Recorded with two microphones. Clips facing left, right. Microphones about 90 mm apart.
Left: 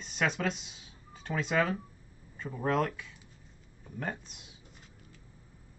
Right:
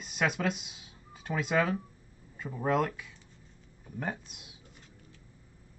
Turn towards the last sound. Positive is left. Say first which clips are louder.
# right 1 dB
turn(degrees=-5)  # may be behind; listen again after turning